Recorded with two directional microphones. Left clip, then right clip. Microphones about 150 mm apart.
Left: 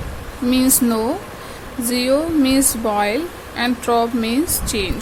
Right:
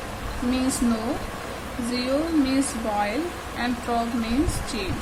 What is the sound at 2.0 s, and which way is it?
A woman's voice, 90° left.